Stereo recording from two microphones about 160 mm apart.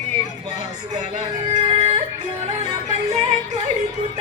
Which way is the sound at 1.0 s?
45° right (ahead or behind).